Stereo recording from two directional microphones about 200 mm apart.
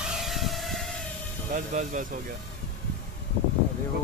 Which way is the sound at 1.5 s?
40° right (ahead or behind).